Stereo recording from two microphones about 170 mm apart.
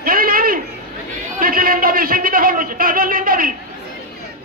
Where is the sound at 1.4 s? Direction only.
55° right (ahead or behind).